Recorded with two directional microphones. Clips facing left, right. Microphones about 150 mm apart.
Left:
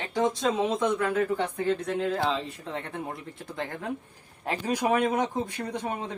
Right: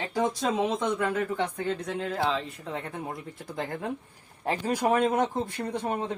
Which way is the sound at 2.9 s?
Centre (ahead or behind).